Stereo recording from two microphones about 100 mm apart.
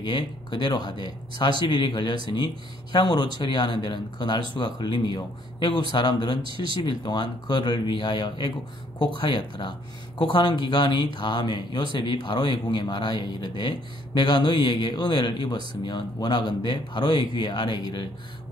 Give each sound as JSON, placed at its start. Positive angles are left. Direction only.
{"t": 0.0, "sound": "speech", "side_deg": 50}